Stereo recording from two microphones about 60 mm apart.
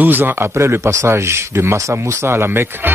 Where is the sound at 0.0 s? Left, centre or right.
Right.